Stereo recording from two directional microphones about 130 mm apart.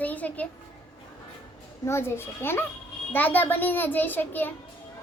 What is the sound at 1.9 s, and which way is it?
A child's voice, 20° left (ahead or behind).